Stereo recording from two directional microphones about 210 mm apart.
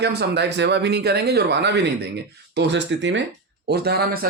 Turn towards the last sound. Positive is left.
turn(degrees=-45)  # may be behind; listen again after turning